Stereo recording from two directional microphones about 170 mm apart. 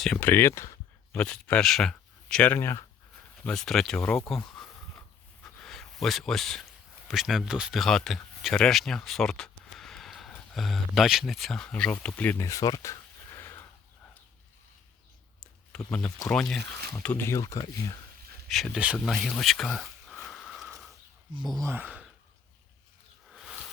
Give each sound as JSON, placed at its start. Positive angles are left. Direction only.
{"t": 0.0, "sound": "speech", "side_deg": 5}
{"t": 3.4, "sound": "speech", "side_deg": 5}
{"t": 4.4, "sound": "a sound", "side_deg": 5}
{"t": 7.1, "sound": "speech", "side_deg": 0}
{"t": 15.7, "sound": "speech", "side_deg": 5}
{"t": 18.4, "sound": "speech", "side_deg": 0}
{"t": 18.9, "sound": "a sound", "side_deg": 0}
{"t": 21.6, "sound": "speech", "side_deg": -10}
{"t": 23.3, "sound": "a sound", "side_deg": 0}